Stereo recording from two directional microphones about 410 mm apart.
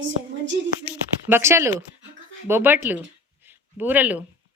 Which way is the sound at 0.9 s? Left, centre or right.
Centre.